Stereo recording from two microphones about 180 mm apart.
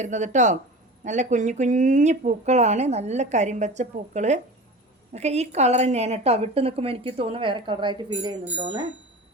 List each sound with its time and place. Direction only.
0.0 s speech: 40° right (ahead or behind)